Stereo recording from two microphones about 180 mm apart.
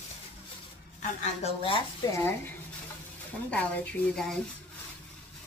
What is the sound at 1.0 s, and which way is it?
Speech, 40° left (ahead or behind).